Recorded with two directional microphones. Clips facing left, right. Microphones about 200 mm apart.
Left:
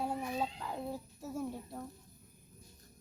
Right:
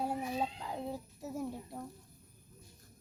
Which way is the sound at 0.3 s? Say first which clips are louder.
Right 1 dB; 15° right (ahead or behind).